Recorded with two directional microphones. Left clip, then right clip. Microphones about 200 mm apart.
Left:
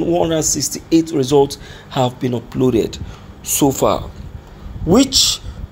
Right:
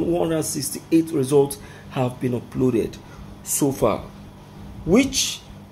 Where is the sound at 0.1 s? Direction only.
10° left (ahead or behind).